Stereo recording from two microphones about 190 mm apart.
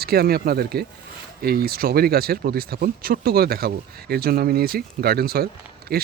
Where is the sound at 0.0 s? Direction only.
55° right (ahead or behind).